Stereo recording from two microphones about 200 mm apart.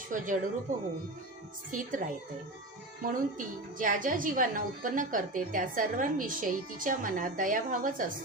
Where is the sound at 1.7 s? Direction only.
40° right (ahead or behind).